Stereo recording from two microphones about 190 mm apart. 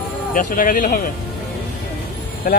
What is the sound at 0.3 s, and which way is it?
Speech, 45° left (ahead or behind).